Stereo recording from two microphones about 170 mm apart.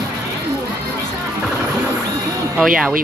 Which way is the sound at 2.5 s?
Centre (ahead or behind).